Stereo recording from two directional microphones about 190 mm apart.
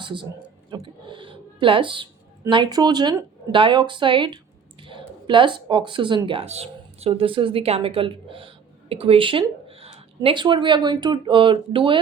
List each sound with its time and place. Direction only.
0.0 s speech: 25° right (ahead or behind)
1.0 s a sound: 25° right (ahead or behind)
2.4 s speech: 25° right (ahead or behind)